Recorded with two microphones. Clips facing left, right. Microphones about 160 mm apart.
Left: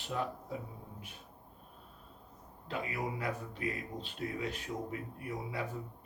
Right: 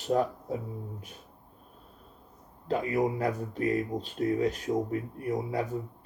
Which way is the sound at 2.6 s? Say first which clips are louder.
Right 10 dB; 40° right (ahead or behind).